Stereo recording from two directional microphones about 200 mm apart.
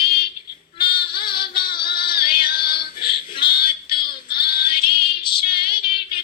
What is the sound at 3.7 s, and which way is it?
Female singing, 25° left (ahead or behind).